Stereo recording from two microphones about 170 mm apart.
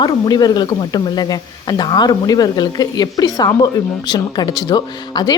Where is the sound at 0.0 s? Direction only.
25° left (ahead or behind).